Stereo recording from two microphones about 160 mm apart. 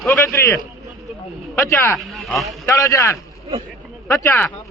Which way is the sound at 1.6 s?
15° left (ahead or behind).